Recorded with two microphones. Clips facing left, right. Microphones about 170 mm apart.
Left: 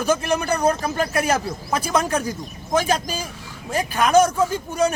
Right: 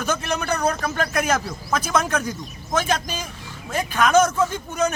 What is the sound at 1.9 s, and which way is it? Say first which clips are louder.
A man's voice: left 2 dB; 35° left (ahead or behind).